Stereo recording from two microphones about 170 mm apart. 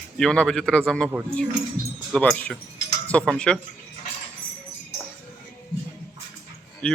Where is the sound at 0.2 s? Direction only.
5° left (ahead or behind).